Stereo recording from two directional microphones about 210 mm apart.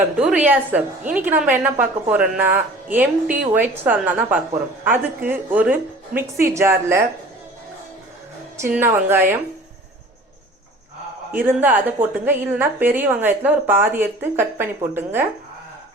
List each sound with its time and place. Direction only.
0.2 s a woman's voice: 5° right (ahead or behind)
8.6 s a woman's voice: 10° right (ahead or behind)
11.3 s a woman's voice: 10° right (ahead or behind)